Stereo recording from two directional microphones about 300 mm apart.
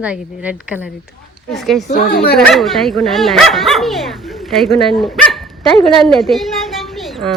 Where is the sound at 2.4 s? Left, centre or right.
Centre.